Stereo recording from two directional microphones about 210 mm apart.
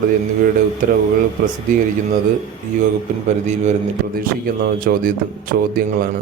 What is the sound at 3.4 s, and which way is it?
A man's voice, 35° right (ahead or behind).